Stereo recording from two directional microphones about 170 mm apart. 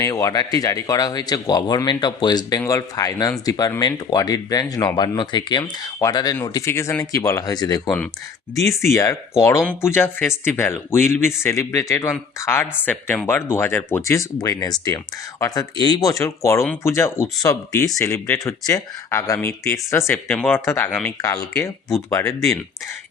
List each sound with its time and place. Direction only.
0.0 s speech: 20° left (ahead or behind)
7.9 s speech: 5° left (ahead or behind)